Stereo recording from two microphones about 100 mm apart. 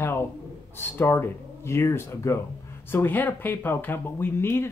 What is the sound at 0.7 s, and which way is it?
Speech, 20° left (ahead or behind).